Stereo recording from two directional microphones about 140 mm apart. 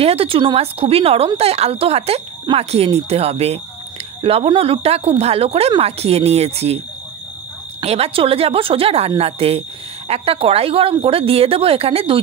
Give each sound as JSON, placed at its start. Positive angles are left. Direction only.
{"t": 0.0, "sound": "a woman's voice", "side_deg": -45}
{"t": 7.8, "sound": "a woman's voice", "side_deg": -45}